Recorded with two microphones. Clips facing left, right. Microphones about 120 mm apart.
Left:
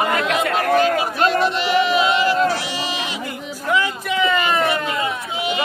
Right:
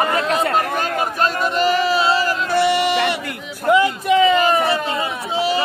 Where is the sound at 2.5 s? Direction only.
60° right (ahead or behind).